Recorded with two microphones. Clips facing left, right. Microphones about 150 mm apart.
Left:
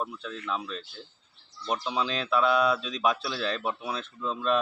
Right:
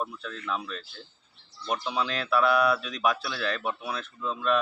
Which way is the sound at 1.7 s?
25° left (ahead or behind).